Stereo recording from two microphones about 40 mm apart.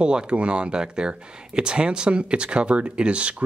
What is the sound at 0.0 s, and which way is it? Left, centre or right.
Speech, right.